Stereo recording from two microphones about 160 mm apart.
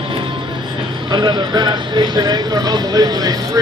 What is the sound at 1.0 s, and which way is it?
Speech, 25° right (ahead or behind).